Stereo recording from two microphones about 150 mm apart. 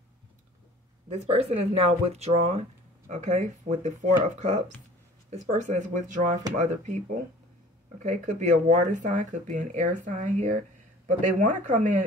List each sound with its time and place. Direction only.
1.1 s speech: 45° right (ahead or behind)
8.0 s speech: 50° right (ahead or behind)